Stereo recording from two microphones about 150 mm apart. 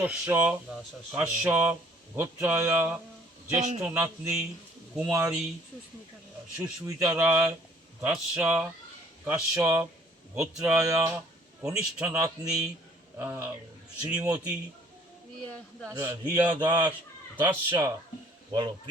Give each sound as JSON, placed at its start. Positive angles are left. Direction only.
{"t": 0.0, "sound": "speech", "side_deg": -10}
{"t": 3.5, "sound": "a man's voice", "side_deg": -50}
{"t": 3.8, "sound": "speech", "side_deg": -10}
{"t": 6.6, "sound": "speech", "side_deg": -20}
{"t": 11.6, "sound": "speech", "side_deg": -5}
{"t": 12.0, "sound": "speech", "side_deg": -20}
{"t": 15.9, "sound": "speech", "side_deg": -20}